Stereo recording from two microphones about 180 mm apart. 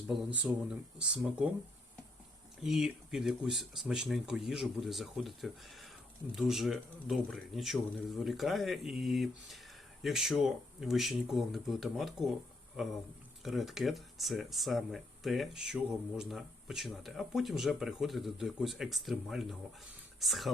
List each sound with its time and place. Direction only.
0.1 s speech: 5° right (ahead or behind)
2.6 s speech: centre (ahead or behind)